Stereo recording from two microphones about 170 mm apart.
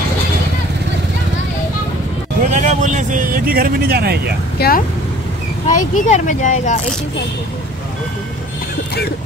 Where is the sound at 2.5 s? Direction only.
40° right (ahead or behind); by 4.3 s 65° right (ahead or behind).